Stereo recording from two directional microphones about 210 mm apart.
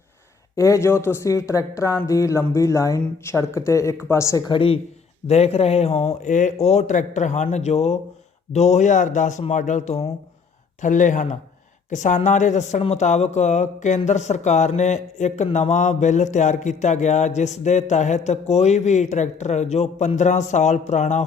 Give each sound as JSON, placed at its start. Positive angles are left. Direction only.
{"t": 0.5, "sound": "speech", "side_deg": 15}